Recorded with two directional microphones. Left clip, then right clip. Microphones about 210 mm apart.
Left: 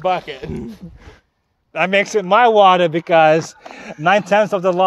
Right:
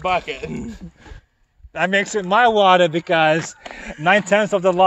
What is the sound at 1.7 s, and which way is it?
Speech, 40° left (ahead or behind).